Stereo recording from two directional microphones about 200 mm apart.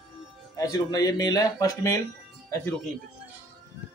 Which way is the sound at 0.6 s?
20° left (ahead or behind).